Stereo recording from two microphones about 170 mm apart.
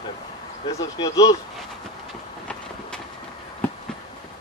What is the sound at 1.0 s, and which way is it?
Speech, 25° left (ahead or behind).